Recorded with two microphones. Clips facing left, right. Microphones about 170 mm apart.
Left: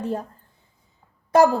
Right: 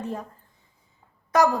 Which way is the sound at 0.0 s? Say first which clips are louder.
Left 5 dB; 35° left (ahead or behind).